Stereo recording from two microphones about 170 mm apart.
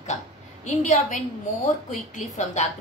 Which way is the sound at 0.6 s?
45° left (ahead or behind).